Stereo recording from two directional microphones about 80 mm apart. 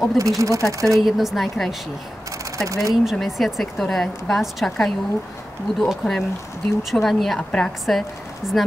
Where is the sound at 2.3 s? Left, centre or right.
Right.